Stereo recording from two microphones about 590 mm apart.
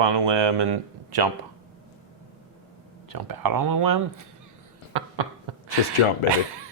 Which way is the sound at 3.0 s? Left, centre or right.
Right.